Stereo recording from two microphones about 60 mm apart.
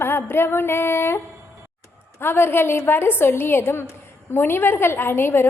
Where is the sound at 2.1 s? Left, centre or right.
Left.